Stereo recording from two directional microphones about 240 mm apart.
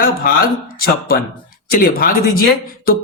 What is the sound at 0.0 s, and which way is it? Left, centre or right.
Speech, left.